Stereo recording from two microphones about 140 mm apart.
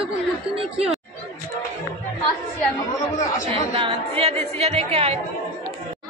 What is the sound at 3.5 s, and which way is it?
Speech, 40° right (ahead or behind).